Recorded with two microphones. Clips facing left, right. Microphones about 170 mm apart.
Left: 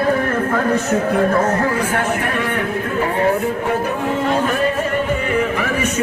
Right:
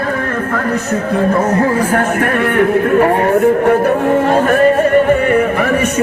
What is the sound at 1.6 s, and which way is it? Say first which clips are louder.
A man's voice: right 5 dB; 35° right (ahead or behind).